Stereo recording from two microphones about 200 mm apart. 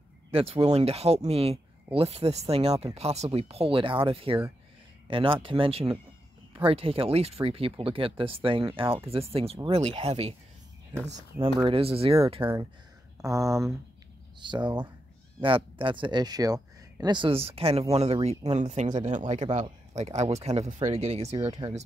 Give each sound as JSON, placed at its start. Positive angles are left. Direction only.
{"t": 0.3, "sound": "speech", "side_deg": -30}
{"t": 12.4, "sound": "speech", "side_deg": -10}